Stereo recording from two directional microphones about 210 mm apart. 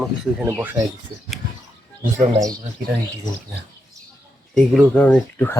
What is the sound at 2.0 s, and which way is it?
Speech, 15° right (ahead or behind).